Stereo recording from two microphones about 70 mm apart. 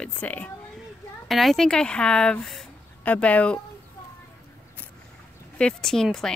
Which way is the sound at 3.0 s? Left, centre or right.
Left.